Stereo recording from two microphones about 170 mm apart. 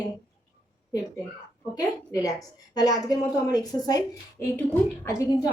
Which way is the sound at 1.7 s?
20° left (ahead or behind).